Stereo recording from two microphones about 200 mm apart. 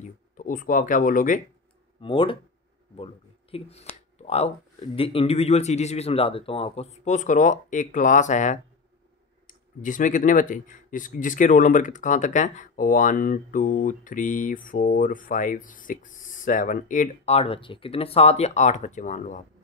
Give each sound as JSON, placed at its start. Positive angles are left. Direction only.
{"t": 0.0, "sound": "speech", "side_deg": 40}
{"t": 2.0, "sound": "speech", "side_deg": 25}
{"t": 3.5, "sound": "speech", "side_deg": 30}